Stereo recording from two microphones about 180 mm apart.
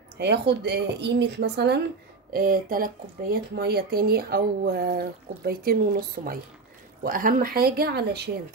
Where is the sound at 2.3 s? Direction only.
55° right (ahead or behind).